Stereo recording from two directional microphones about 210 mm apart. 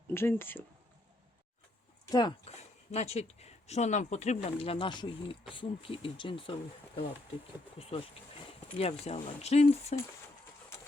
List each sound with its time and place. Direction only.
0.1 s speech: 10° left (ahead or behind)
2.0 s speech: 20° left (ahead or behind)
8.4 s a sound: 30° left (ahead or behind)
9.0 s speech: 30° left (ahead or behind)